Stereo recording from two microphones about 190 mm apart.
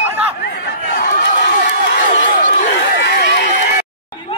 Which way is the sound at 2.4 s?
55° left (ahead or behind).